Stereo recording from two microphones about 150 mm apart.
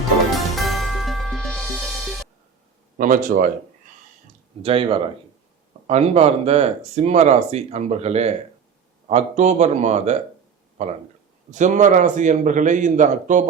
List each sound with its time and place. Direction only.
0.3 s music: centre (ahead or behind)
3.0 s a man's voice: 60° right (ahead or behind)
4.6 s speech: 40° right (ahead or behind)
11.5 s a man's voice: 55° right (ahead or behind)